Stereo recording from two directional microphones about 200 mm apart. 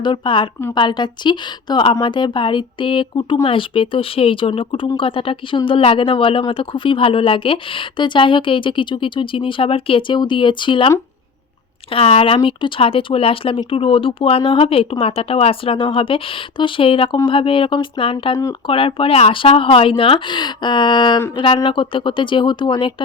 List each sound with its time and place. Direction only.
0.0 s speech: 25° left (ahead or behind)
11.9 s speech: 30° left (ahead or behind)